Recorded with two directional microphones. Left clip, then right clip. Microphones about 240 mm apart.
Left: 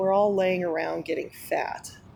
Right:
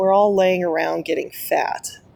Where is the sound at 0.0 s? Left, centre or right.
Right.